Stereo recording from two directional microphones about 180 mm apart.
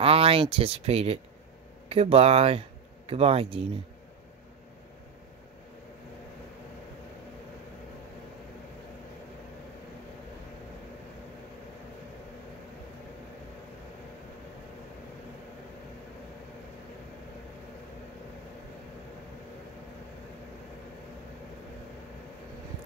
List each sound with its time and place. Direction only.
0.0 s speech: 30° right (ahead or behind)